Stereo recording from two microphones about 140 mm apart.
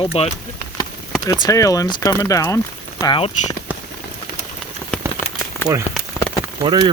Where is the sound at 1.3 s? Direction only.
25° left (ahead or behind).